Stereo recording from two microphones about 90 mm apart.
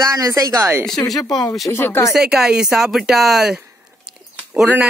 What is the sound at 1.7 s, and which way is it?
Speech, 25° left (ahead or behind).